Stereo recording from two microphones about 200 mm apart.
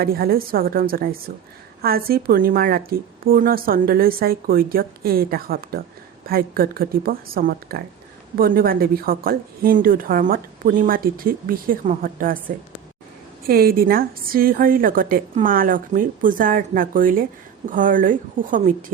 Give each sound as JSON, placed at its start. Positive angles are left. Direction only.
{"t": 0.0, "sound": "a woman's voice", "side_deg": -50}